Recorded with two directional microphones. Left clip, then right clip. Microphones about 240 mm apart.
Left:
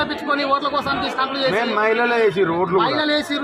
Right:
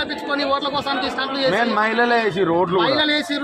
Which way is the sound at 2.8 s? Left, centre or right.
Centre.